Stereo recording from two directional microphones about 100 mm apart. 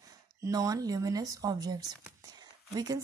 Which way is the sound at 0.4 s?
35° right (ahead or behind).